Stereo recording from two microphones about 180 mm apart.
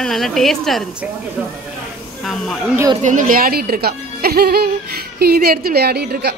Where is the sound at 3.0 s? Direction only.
45° right (ahead or behind); by 6.4 s 60° right (ahead or behind).